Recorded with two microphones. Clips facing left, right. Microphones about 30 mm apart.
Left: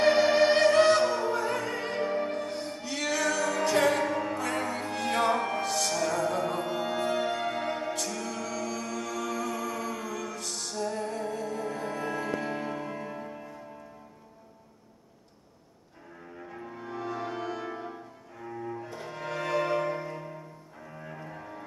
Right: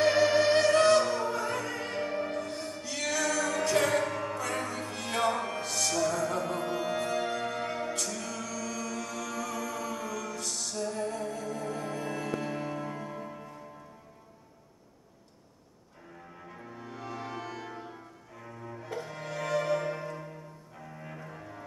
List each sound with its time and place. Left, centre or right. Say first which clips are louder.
0.2 s music: left 2 dB; left
5.8 s music: right 2 dB; centre
8.4 s music: left 2 dB; left
10.8 s music: left 2 dB; centre
11.1 s music: left 2 dB; left; by 13.6 s centre
16.7 s music: left 5 dB; centre
19.2 s music: left 2 dB; left
20.0 s music: left 2 dB; centre